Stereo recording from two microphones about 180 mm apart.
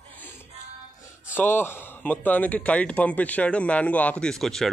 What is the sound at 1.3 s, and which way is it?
Speech, 10° left (ahead or behind).